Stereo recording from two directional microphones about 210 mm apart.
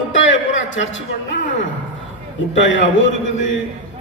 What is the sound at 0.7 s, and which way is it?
Speech, 65° left (ahead or behind).